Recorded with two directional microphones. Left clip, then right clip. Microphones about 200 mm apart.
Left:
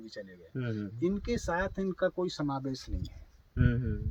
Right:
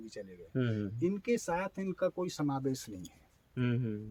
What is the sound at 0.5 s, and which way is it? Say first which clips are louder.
Speech: right 4 dB; 50° right (ahead or behind).